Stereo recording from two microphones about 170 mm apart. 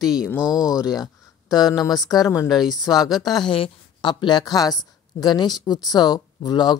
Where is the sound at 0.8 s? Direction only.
20° left (ahead or behind).